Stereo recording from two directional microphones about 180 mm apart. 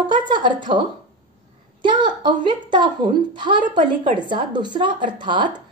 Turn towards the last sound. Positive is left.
turn(degrees=-25)  # may be behind; listen again after turning